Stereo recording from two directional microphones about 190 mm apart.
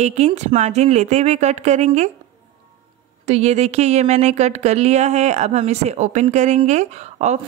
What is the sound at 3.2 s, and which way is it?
A woman's voice, 35° right (ahead or behind).